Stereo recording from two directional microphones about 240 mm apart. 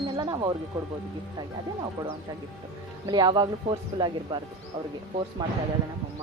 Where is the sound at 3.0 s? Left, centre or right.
Centre.